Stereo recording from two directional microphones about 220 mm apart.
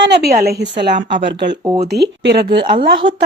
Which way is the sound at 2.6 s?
20° right (ahead or behind).